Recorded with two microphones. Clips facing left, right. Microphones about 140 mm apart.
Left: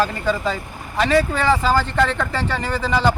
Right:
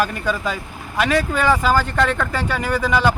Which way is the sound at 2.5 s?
10° right (ahead or behind).